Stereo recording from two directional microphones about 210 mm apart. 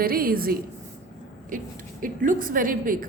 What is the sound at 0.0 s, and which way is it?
A woman's voice, 45° right (ahead or behind).